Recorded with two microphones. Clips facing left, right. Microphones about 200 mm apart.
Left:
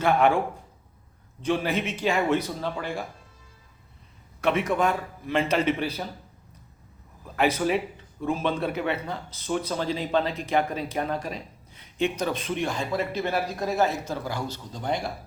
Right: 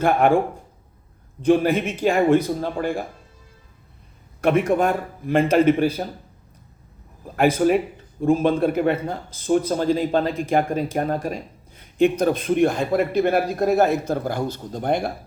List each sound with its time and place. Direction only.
0.0 s speech: 50° right (ahead or behind)
4.4 s speech: 50° right (ahead or behind)
7.3 s speech: 50° right (ahead or behind)